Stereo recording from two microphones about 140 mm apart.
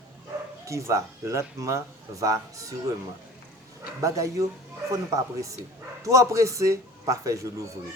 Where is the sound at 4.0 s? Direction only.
25° right (ahead or behind).